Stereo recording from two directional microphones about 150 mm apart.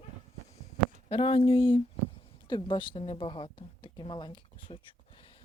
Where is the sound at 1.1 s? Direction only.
40° left (ahead or behind).